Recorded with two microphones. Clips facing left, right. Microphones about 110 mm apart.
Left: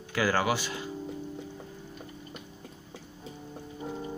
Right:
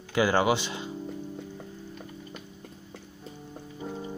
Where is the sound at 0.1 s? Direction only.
20° right (ahead or behind).